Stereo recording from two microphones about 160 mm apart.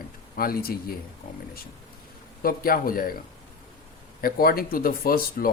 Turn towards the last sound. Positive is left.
turn(degrees=65)  # may be behind; listen again after turning